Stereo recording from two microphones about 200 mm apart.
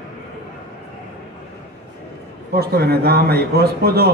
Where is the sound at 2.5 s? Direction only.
50° right (ahead or behind).